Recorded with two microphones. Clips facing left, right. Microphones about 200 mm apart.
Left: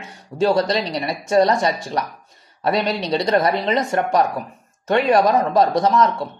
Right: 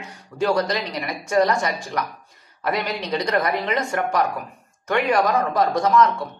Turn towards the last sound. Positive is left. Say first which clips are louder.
# left 1 dB
turn(degrees=25)  # may be behind; listen again after turning